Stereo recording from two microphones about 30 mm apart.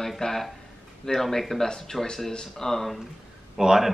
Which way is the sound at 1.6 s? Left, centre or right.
Left.